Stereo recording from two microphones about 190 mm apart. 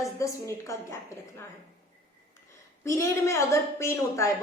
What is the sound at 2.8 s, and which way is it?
A woman's voice, 15° left (ahead or behind).